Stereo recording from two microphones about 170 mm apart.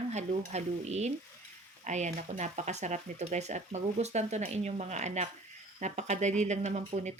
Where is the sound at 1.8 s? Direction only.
45° right (ahead or behind).